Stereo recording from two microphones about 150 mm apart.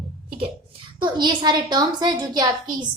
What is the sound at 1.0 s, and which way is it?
A woman's voice, 30° right (ahead or behind).